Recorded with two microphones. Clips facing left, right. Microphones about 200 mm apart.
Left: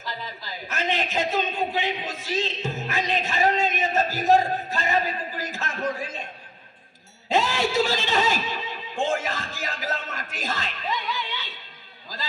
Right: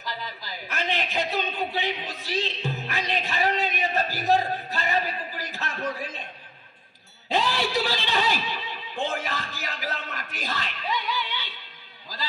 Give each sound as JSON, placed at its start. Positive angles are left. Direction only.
{"t": 0.7, "sound": "a man's voice", "side_deg": 45}
{"t": 7.3, "sound": "music", "side_deg": 45}